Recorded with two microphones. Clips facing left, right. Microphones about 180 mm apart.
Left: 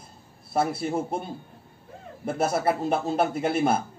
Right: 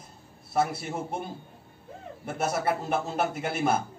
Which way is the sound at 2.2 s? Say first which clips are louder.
Left 4 dB; 35° left (ahead or behind).